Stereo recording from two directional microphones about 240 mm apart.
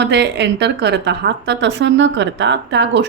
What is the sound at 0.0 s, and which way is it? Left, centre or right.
A woman's voice, right.